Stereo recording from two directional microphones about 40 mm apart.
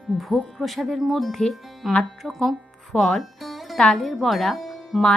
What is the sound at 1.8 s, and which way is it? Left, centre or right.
Speech, centre.